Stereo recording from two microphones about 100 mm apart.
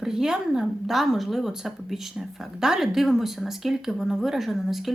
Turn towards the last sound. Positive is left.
turn(degrees=0)  # may be behind; listen again after turning